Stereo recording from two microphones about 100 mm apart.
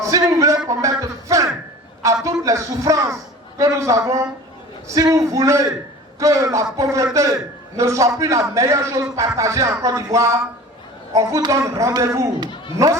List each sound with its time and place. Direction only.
0.0 s a man's voice: 35° right (ahead or behind)